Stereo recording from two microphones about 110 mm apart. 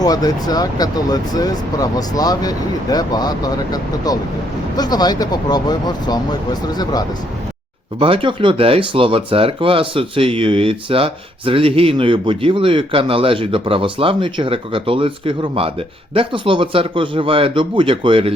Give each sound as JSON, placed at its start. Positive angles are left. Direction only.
{"t": 0.0, "sound": "speech", "side_deg": 35}
{"t": 7.9, "sound": "speech", "side_deg": -55}